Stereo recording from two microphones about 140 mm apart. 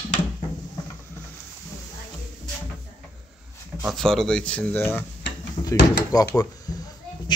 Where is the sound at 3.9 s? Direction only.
5° left (ahead or behind).